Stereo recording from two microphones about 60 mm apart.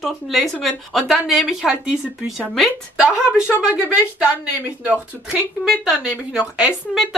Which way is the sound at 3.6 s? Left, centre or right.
Centre.